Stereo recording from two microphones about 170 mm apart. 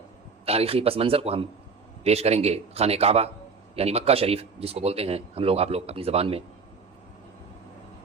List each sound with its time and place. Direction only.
0.4 s a man's voice: 35° right (ahead or behind)